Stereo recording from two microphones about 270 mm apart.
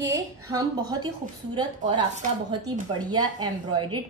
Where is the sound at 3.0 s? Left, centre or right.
Centre.